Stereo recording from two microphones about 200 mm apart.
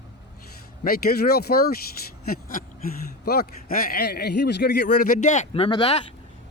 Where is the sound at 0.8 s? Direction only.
50° left (ahead or behind).